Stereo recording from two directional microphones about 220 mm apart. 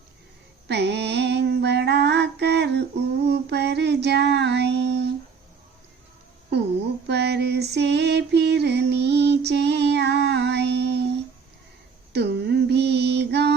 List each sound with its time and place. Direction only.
0.7 s female singing: 50° right (ahead or behind)
3.2 s child singing: 50° right (ahead or behind)
7.1 s female singing: 50° right (ahead or behind)
12.1 s a sound: 50° right (ahead or behind)